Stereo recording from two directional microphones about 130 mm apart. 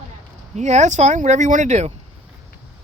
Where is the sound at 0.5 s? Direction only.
65° right (ahead or behind).